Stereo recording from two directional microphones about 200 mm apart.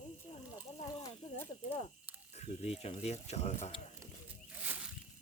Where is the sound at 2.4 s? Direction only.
30° left (ahead or behind).